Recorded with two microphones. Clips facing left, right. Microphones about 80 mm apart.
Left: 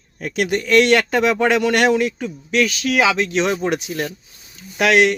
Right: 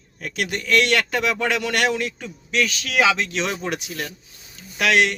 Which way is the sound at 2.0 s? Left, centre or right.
Centre.